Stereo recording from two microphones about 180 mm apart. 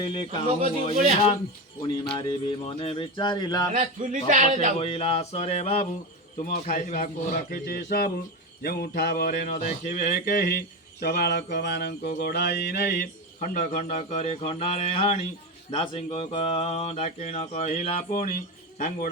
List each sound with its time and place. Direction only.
0.0 s speech: 25° left (ahead or behind)
1.8 s speech: 25° left (ahead or behind)
3.8 s a man's voice: 45° right (ahead or behind)
4.8 s speech: 35° left (ahead or behind)
6.4 s a man's voice: 50° left (ahead or behind)
10.2 s a man's voice: 50° left (ahead or behind)
11.0 s mantra: 60° left (ahead or behind); by 15.2 s 35° left (ahead or behind)
15.7 s a man's voice: 35° left (ahead or behind)